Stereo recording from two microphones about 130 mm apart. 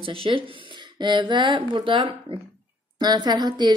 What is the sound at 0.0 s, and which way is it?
Speech, 45° right (ahead or behind).